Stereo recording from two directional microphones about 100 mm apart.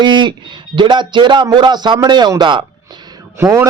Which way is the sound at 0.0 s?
50° right (ahead or behind).